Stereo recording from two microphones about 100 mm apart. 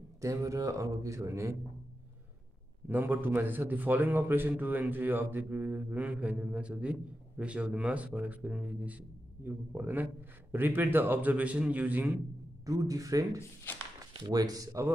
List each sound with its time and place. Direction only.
0.2 s speech: 30° right (ahead or behind)
2.9 s a man's voice: 20° right (ahead or behind)
12.6 s speech: 35° right (ahead or behind)
13.7 s speech: 20° left (ahead or behind)
14.1 s speech: 40° right (ahead or behind)